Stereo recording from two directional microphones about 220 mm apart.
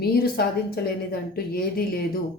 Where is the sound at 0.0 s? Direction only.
45° left (ahead or behind).